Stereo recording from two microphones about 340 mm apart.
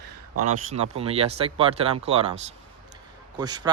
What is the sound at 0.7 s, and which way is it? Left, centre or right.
Speech, centre.